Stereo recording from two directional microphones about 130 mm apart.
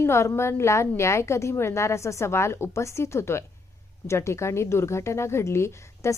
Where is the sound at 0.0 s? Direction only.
20° left (ahead or behind).